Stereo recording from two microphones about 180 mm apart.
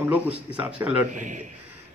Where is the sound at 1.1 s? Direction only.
45° right (ahead or behind).